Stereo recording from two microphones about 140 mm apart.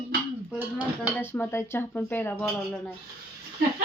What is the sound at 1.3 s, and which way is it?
Speech, 15° left (ahead or behind).